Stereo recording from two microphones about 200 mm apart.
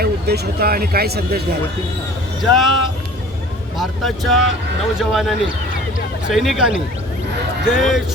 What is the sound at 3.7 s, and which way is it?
Speech, centre (ahead or behind).